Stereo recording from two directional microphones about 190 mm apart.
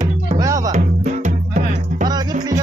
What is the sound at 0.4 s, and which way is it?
Music, 20° right (ahead or behind).